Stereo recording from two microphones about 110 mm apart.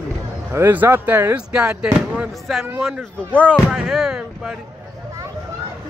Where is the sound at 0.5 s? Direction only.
20° right (ahead or behind).